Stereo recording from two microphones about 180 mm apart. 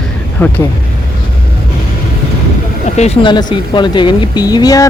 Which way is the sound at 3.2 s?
25° left (ahead or behind).